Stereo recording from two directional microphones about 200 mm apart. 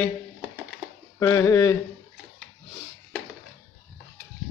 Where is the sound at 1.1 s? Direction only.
15° left (ahead or behind).